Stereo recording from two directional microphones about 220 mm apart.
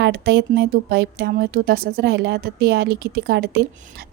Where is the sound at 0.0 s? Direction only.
50° right (ahead or behind).